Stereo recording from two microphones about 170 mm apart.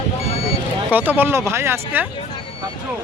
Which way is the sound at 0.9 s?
10° right (ahead or behind).